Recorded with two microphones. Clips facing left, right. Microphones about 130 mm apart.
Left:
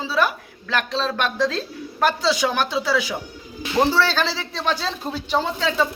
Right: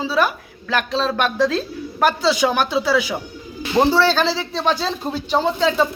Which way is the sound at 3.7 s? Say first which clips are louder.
Right 3 dB; 20° right (ahead or behind).